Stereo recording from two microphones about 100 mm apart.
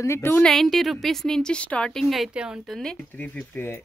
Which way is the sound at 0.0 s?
25° left (ahead or behind).